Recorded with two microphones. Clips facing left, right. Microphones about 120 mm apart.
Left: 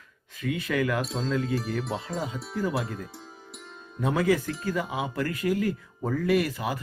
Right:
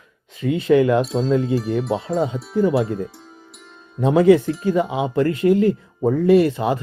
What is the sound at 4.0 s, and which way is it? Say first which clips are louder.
Speech: right 11 dB; 25° right (ahead or behind).